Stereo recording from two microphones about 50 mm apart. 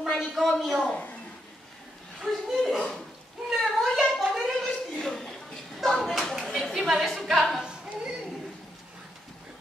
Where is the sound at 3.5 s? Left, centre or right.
Centre.